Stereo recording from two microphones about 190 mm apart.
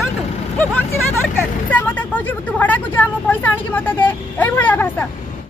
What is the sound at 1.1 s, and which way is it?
Vehicle, 10° left (ahead or behind).